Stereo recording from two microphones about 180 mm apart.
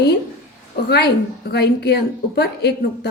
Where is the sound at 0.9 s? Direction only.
65° left (ahead or behind).